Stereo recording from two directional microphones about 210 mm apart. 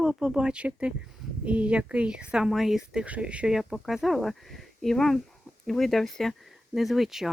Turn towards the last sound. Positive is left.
turn(degrees=0)  # may be behind; listen again after turning